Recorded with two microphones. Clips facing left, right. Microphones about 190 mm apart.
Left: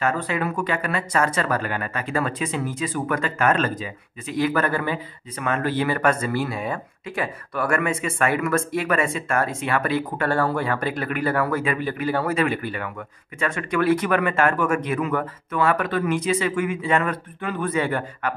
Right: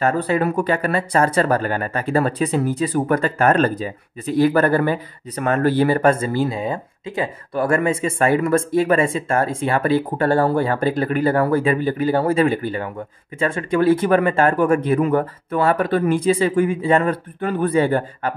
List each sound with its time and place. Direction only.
0.0 s speech: 35° right (ahead or behind)